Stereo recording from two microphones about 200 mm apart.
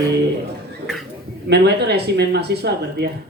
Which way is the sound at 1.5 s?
55° right (ahead or behind).